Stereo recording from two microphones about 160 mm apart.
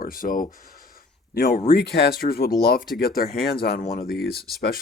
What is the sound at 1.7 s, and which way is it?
Speech, 85° left.